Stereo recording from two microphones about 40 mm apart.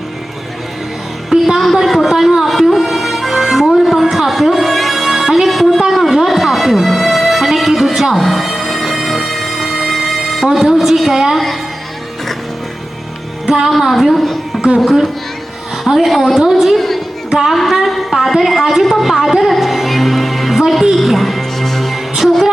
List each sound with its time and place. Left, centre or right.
1.3 s music: centre
1.6 s music: centre
5.9 s a sound: centre
6.8 s music: centre
13.5 s music: centre
14.1 s a sound: centre
15.9 s music: centre
16.4 s a woman's voice: centre
17.3 s music: centre
17.6 s a woman's voice: centre
18.9 s music: centre